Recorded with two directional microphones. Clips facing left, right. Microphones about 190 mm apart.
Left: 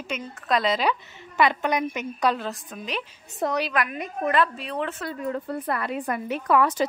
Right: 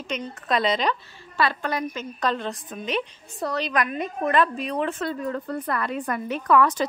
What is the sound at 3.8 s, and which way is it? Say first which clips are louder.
Speech: right 4 dB; 30° right (ahead or behind).